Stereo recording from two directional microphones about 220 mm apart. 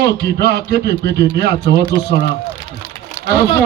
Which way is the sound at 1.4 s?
50° right (ahead or behind).